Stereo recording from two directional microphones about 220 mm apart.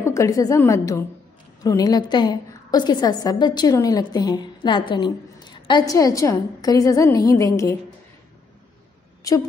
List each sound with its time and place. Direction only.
0.0 s a woman's voice: 15° left (ahead or behind)
9.3 s a woman's voice: 15° left (ahead or behind)